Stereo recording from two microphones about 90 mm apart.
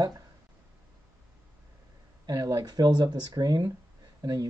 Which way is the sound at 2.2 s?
45° right (ahead or behind).